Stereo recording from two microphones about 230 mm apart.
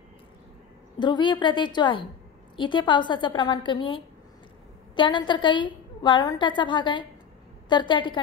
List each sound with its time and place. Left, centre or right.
0.9 s a woman's voice: centre